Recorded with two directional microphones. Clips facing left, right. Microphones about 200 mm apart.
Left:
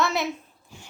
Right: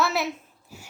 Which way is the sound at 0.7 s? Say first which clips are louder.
Right 2 dB; 5° right (ahead or behind).